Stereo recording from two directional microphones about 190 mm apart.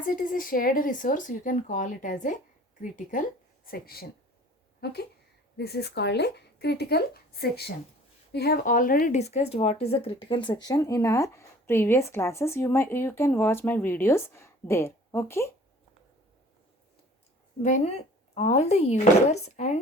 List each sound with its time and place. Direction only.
0.1 s a woman's voice: 45° left (ahead or behind); by 15.4 s 15° left (ahead or behind)
17.6 s speech: 35° left (ahead or behind)